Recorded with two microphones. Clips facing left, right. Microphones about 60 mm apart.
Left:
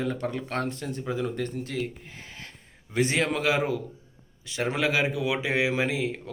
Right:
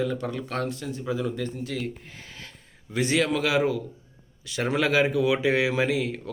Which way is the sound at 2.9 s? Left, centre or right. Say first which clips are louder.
Right 1 dB; left.